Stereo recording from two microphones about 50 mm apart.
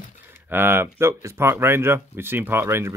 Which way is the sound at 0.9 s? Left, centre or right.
Right.